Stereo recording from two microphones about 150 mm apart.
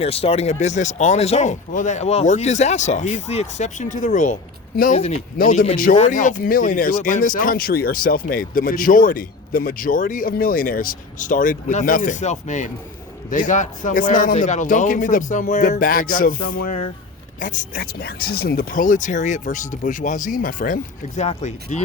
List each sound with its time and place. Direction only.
0.0 s speech: 40° left (ahead or behind); by 4.4 s 55° left (ahead or behind)
4.9 s speech: 45° left (ahead or behind)
5.4 s speech: 65° left (ahead or behind); by 21.8 s 50° left (ahead or behind)